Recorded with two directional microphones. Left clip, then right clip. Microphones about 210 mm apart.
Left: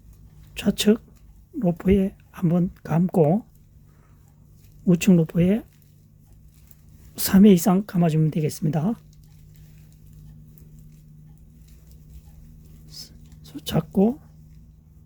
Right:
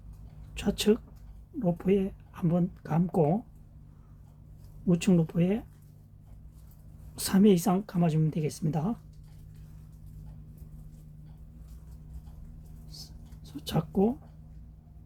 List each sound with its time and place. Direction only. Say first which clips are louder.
0.5 s speech: left 5 dB; 35° left (ahead or behind)
4.9 s speech: left 7 dB; 35° left (ahead or behind)
7.2 s speech: left 7 dB; 40° left (ahead or behind)
12.9 s a sound: left 6 dB; 35° left (ahead or behind)